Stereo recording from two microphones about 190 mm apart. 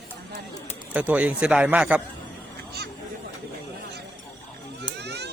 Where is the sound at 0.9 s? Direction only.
5° right (ahead or behind).